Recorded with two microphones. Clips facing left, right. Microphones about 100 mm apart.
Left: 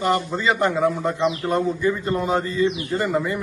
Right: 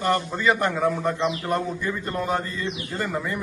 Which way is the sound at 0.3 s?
15° left (ahead or behind).